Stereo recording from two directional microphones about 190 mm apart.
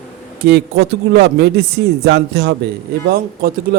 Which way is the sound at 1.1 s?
60° right (ahead or behind).